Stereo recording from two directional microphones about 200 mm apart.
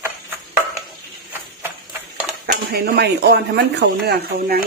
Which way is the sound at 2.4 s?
50° right (ahead or behind).